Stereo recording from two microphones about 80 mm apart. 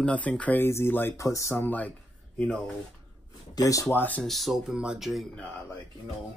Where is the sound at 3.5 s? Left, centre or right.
Left.